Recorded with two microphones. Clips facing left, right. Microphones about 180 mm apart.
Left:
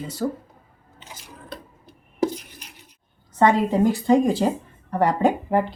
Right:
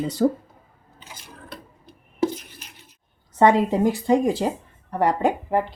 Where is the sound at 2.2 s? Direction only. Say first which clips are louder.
Even; 15° left (ahead or behind).